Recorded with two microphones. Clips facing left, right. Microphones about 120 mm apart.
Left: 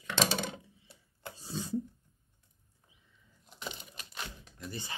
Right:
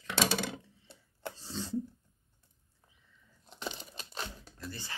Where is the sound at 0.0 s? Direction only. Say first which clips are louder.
Even; 10° right (ahead or behind).